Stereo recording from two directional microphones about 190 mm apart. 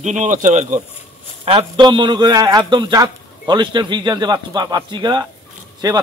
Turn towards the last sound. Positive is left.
turn(degrees=-20)  # may be behind; listen again after turning